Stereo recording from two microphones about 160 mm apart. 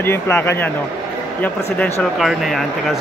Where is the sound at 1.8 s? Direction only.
Centre (ahead or behind).